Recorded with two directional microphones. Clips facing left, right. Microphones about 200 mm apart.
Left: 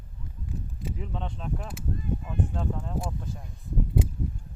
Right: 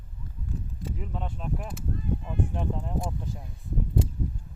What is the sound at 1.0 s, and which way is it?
Speech, 5° right (ahead or behind).